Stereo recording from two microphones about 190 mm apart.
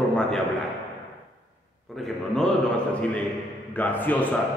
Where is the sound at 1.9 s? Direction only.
Centre (ahead or behind).